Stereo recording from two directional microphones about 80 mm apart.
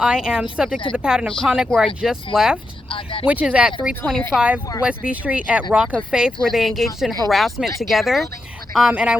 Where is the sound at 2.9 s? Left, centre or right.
Left.